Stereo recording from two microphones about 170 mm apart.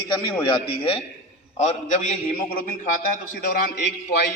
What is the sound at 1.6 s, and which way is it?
A man's voice, 45° left (ahead or behind).